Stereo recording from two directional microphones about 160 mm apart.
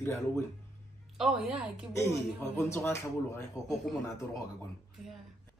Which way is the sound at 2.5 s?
15° left (ahead or behind).